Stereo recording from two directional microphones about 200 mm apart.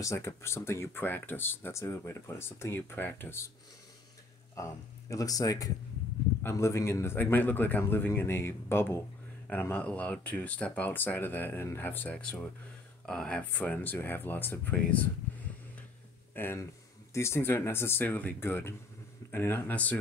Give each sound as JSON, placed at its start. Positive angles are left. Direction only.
{"t": 0.0, "sound": "speech", "side_deg": 15}
{"t": 4.6, "sound": "speech", "side_deg": 15}
{"t": 16.3, "sound": "speech", "side_deg": 10}